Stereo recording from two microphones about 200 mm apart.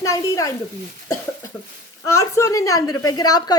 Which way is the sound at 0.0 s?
15° left (ahead or behind).